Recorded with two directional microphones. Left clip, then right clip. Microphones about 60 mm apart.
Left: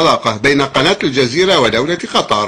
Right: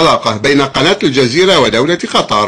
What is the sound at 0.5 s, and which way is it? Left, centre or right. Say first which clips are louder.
Speech: right 2 dB; right.